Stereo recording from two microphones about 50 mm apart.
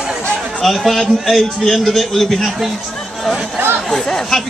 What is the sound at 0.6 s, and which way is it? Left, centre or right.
A man's voice, centre.